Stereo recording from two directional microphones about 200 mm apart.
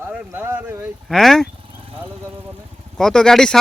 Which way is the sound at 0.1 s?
10° right (ahead or behind).